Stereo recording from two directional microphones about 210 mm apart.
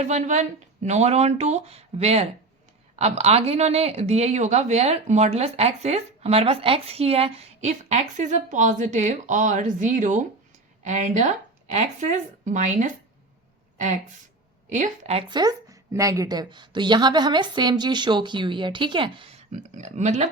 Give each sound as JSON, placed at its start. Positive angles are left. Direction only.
{"t": 0.0, "sound": "a woman's voice", "side_deg": -35}